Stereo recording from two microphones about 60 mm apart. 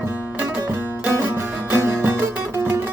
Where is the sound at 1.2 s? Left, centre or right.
Right.